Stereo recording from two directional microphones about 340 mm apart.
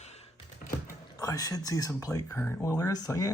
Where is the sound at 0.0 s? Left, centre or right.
Centre.